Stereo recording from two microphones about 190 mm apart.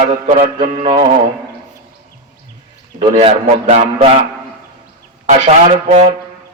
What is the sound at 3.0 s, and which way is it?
A man's voice, 25° right (ahead or behind).